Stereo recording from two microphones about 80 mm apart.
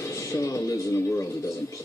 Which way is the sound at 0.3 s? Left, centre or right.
Left.